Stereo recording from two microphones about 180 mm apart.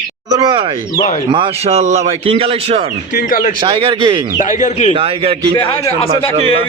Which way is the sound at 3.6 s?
25° right (ahead or behind).